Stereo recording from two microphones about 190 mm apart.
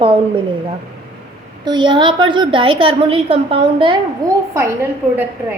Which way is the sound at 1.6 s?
25° right (ahead or behind).